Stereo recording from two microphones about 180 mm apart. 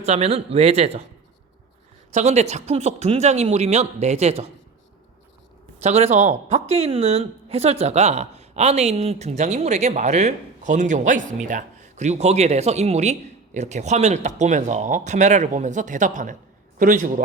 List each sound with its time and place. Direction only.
0.0 s speech: 35° right (ahead or behind)
2.1 s speech: 40° right (ahead or behind)
5.8 s speech: 40° right (ahead or behind)